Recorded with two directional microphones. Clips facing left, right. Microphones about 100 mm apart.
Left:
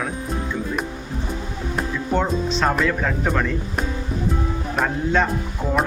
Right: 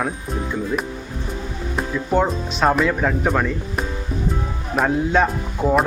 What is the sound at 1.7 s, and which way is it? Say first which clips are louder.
Speech: right 3 dB; 10° right (ahead or behind).